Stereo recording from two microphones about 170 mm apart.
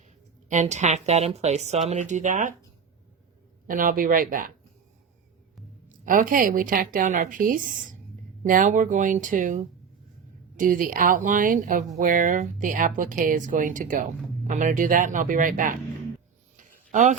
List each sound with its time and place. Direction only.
0.0 s a woman's voice: 45° right (ahead or behind)
3.7 s speech: 55° right (ahead or behind)
6.1 s speech: 50° right (ahead or behind)
16.6 s a sound: 50° right (ahead or behind)